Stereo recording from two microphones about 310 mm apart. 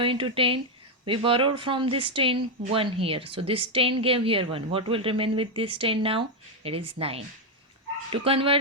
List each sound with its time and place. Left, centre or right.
0.0 s speech: centre